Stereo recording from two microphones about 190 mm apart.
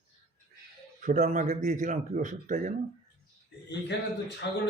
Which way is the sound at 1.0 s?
40° right (ahead or behind).